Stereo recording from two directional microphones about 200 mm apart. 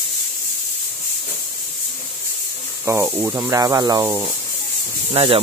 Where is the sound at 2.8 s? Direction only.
10° right (ahead or behind).